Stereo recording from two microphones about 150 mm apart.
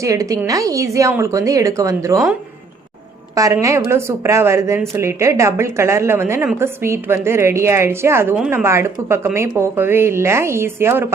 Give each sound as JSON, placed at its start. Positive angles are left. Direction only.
{"t": 0.0, "sound": "speech", "side_deg": -20}
{"t": 3.3, "sound": "speech", "side_deg": -20}